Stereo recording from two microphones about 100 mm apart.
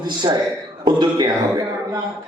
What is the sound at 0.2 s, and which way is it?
A man's voice, 40° right (ahead or behind).